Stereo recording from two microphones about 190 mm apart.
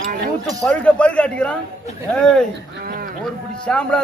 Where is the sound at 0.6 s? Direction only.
5° left (ahead or behind).